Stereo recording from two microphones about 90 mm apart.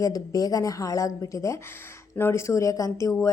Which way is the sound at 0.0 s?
45° left (ahead or behind).